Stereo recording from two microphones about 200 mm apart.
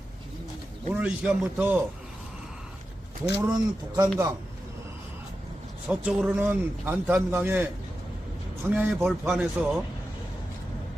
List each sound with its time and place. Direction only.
0.9 s speech: 5° right (ahead or behind)
3.3 s a man's voice: 15° right (ahead or behind)
5.9 s a man's voice: 5° right (ahead or behind)
8.7 s speech: 10° right (ahead or behind)